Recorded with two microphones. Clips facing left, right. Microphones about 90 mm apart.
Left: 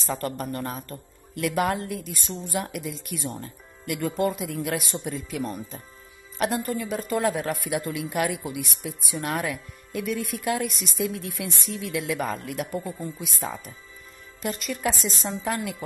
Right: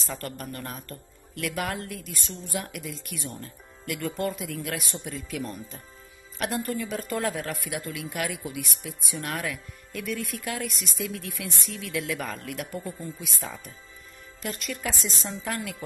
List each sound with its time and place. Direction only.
0.0 s speech: 25° left (ahead or behind)
6.4 s speech: 10° left (ahead or behind)
13.2 s speech: 30° left (ahead or behind)
14.8 s speech: 20° left (ahead or behind)